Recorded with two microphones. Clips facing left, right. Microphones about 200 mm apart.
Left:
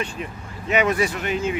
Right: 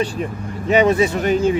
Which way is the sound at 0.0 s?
35° right (ahead or behind).